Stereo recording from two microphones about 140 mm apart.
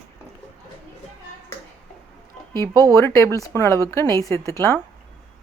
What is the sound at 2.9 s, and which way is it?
Speech, 20° left (ahead or behind).